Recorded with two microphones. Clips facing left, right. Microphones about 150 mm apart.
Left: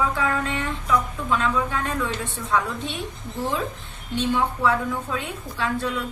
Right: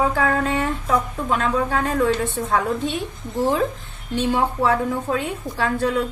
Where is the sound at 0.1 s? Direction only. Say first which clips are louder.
Right 4 dB; 40° right (ahead or behind).